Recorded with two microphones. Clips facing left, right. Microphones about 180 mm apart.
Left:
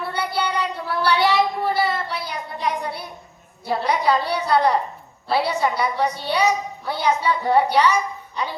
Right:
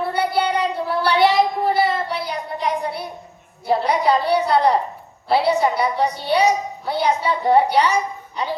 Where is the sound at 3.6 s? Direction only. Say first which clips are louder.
Right 3 dB; 25° right (ahead or behind).